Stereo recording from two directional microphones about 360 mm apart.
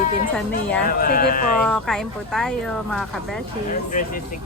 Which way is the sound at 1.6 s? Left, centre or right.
Centre.